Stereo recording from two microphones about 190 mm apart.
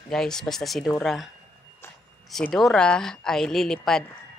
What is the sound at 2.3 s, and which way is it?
A woman's voice, centre (ahead or behind).